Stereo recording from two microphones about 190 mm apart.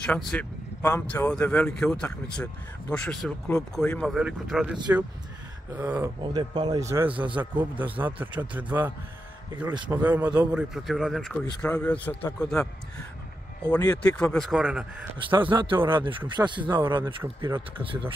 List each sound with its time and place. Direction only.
0.0 s speech: 5° left (ahead or behind); by 6.0 s 10° right (ahead or behind)
6.3 s speech: 20° right (ahead or behind)
7.1 s speech: 25° right (ahead or behind)
8.0 s speech: 10° right (ahead or behind)
9.7 s speech: 20° right (ahead or behind)
10.0 s speech: 10° right (ahead or behind); by 12.6 s 10° left (ahead or behind)
13.7 s speech: 5° left (ahead or behind)
15.1 s speech: 25° right (ahead or behind)
16.7 s speech: 10° right (ahead or behind)